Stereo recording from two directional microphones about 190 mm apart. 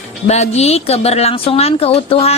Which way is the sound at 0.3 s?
35° left (ahead or behind).